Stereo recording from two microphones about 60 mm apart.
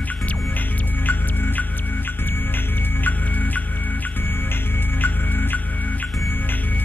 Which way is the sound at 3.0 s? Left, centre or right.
Left.